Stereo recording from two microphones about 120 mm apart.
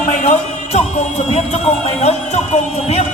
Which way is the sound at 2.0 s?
65° left (ahead or behind).